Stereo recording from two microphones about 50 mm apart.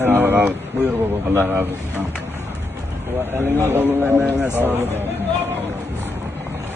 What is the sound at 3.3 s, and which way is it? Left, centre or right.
Speech, right.